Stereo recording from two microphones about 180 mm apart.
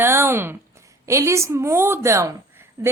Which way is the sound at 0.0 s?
15° right (ahead or behind).